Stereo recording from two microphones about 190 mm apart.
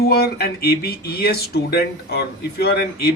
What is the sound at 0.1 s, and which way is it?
Speech, 55° left (ahead or behind).